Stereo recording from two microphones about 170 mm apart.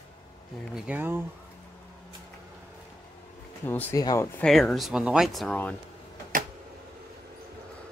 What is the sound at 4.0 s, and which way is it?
Speech, 20° left (ahead or behind).